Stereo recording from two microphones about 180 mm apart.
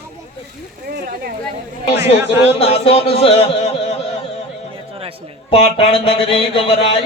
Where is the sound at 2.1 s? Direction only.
15° right (ahead or behind).